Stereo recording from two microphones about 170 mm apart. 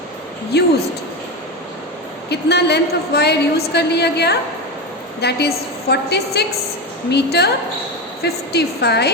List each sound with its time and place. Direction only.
0.5 s a woman's voice: 75° left (ahead or behind)
2.3 s a woman's voice: 75° left (ahead or behind)